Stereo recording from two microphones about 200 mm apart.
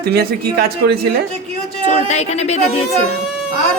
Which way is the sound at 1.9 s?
35° left (ahead or behind).